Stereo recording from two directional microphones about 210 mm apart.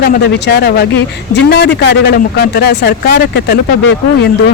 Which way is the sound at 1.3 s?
55° left (ahead or behind).